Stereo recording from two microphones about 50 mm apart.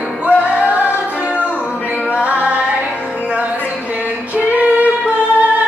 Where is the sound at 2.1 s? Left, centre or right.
Right.